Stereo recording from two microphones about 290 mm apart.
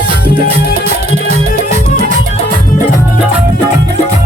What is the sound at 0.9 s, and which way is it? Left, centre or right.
Music, right.